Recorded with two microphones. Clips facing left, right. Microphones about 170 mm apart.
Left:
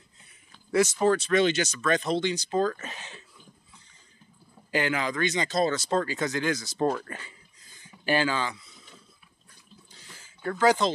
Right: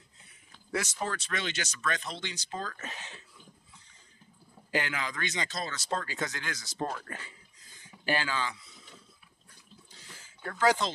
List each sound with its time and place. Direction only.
0.9 s speech: 25° left (ahead or behind)
4.7 s speech: 30° left (ahead or behind)
6.8 s speech: 30° left (ahead or behind)
10.4 s speech: 20° left (ahead or behind)